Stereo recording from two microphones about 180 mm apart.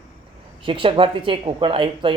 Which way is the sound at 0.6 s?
30° right (ahead or behind).